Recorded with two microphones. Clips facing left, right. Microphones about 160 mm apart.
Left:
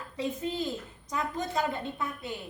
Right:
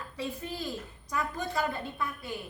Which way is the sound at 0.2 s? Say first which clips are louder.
Left 5 dB; 20° left (ahead or behind).